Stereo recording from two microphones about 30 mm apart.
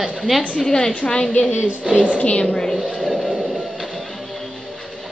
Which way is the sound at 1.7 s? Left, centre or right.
Right.